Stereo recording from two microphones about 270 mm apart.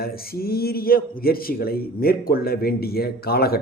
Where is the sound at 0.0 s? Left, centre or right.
Left.